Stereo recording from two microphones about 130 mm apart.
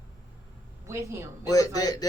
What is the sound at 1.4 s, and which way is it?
Speech, 30° left (ahead or behind).